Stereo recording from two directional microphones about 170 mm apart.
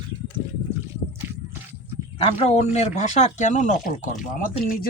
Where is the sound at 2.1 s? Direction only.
35° left (ahead or behind).